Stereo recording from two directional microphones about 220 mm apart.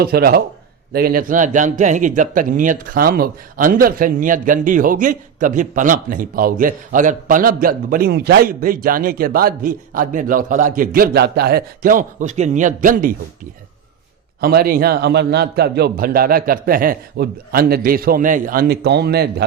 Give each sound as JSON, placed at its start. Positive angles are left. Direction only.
{"t": 0.0, "sound": "a man's voice", "side_deg": -45}